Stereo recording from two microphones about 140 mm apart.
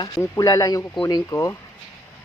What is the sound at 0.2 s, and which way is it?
Speech, 25° left (ahead or behind).